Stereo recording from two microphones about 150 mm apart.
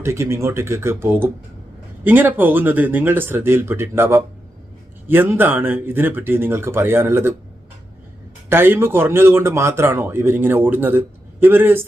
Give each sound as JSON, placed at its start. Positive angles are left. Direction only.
{"t": 0.0, "sound": "speech", "side_deg": -15}
{"t": 8.4, "sound": "speech", "side_deg": -15}